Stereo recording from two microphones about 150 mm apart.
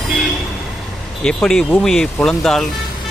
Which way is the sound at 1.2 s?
5° left (ahead or behind).